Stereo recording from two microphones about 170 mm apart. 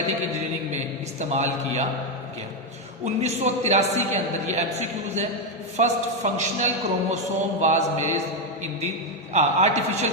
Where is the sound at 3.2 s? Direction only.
40° right (ahead or behind).